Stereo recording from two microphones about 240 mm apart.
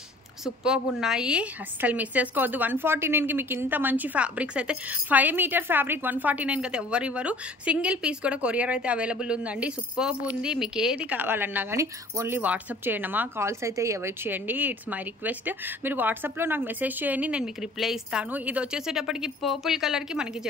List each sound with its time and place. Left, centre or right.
0.7 s a woman's voice: centre